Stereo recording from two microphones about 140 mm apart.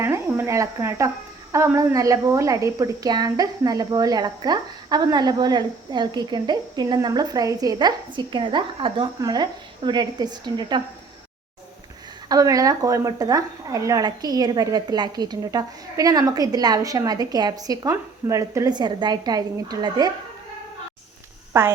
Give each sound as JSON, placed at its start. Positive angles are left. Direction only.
{"t": 0.0, "sound": "a woman's voice", "side_deg": -20}
{"t": 12.3, "sound": "a woman's voice", "side_deg": -25}
{"t": 21.5, "sound": "a woman's voice", "side_deg": -15}